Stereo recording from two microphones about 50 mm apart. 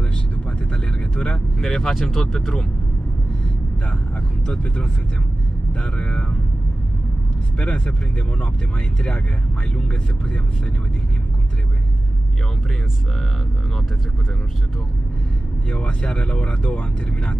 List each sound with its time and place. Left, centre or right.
1.1 s speech: centre
5.7 s speech: left
7.5 s speech: left
9.8 s speech: left
15.7 s speech: left